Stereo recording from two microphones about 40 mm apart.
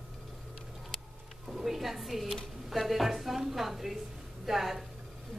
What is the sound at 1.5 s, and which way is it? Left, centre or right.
A woman's voice, centre.